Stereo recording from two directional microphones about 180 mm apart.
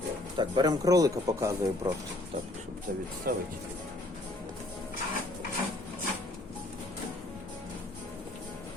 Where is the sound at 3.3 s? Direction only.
55° right (ahead or behind).